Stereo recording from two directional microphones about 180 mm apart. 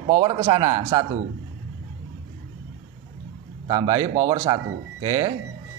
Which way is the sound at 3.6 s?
25° right (ahead or behind).